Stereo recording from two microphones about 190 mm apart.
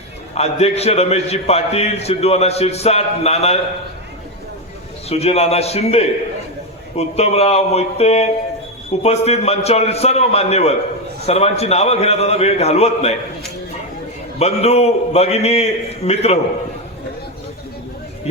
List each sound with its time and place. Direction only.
0.3 s a man's voice: 35° left (ahead or behind)
5.0 s a man's voice: 35° left (ahead or behind)
14.3 s a man's voice: 35° left (ahead or behind)